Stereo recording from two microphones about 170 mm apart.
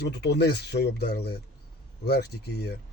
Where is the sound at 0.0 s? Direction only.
80° left.